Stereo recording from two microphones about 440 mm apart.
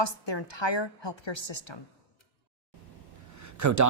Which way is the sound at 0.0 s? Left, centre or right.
Left.